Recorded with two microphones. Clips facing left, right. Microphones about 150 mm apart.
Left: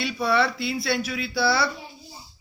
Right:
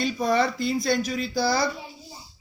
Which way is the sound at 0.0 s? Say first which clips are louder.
Even; 45° right (ahead or behind).